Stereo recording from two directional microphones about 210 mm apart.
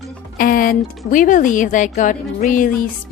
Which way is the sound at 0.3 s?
40° left (ahead or behind).